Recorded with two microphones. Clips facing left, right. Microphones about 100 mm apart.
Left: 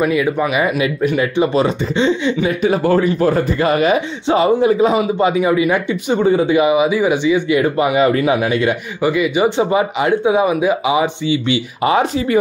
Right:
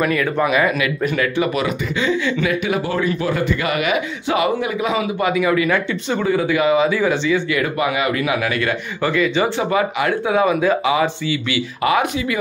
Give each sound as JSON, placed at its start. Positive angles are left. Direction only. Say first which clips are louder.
{"t": 0.0, "sound": "speech", "louder": "left 2 dB", "side_deg": 10}
{"t": 0.7, "sound": "a man's voice", "louder": "left 3 dB", "side_deg": 25}